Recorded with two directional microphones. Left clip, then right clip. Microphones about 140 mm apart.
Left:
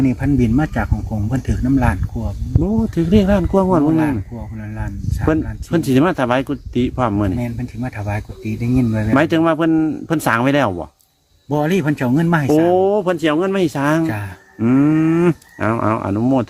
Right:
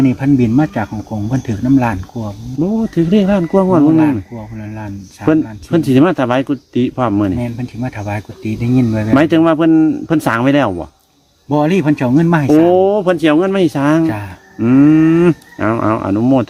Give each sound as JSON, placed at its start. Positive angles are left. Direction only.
{"t": 0.0, "sound": "speech", "side_deg": 15}
{"t": 0.3, "sound": "speech", "side_deg": 30}